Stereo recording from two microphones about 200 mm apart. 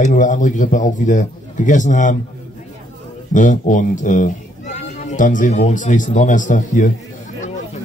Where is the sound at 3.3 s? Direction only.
40° left (ahead or behind).